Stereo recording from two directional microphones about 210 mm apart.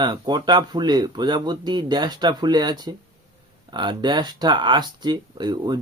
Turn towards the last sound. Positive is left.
turn(degrees=-20)  # may be behind; listen again after turning